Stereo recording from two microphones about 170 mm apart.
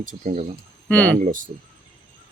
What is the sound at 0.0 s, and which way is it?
Speech, 45° right (ahead or behind).